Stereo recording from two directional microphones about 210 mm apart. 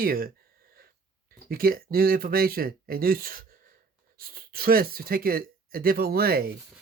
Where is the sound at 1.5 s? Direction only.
45° right (ahead or behind).